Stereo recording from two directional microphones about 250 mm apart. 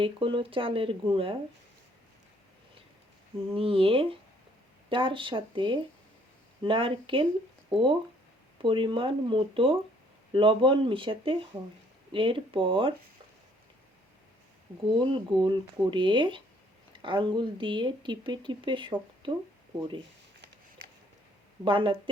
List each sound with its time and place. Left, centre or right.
0.0 s speech: right
3.5 s speech: right
15.1 s speech: centre
21.6 s speech: centre